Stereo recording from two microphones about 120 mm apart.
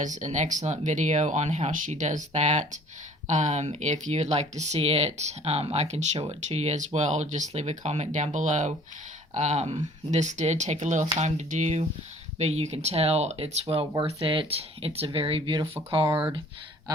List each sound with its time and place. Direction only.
0.0 s speech: 90° right
9.3 s speech: 70° right (ahead or behind); by 11.1 s 90° right
11.2 s speech: 75° right (ahead or behind); by 16.0 s 50° right (ahead or behind)